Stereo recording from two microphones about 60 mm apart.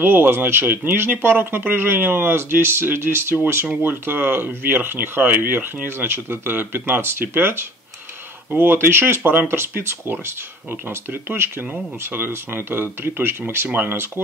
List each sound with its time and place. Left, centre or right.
0.0 s speech: right